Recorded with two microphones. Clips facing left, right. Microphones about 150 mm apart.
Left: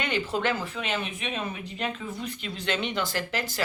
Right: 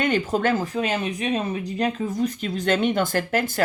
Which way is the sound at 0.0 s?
45° right (ahead or behind).